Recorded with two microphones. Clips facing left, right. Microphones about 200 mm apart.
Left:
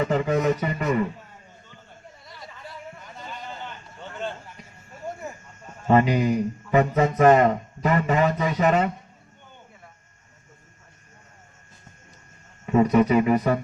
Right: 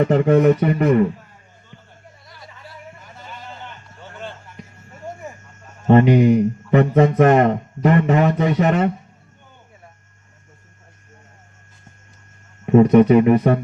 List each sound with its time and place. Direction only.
0.0 s speech: 60° right (ahead or behind)
2.2 s a sound: centre (ahead or behind)
5.9 s speech: 60° right (ahead or behind)
12.6 s speech: 55° right (ahead or behind)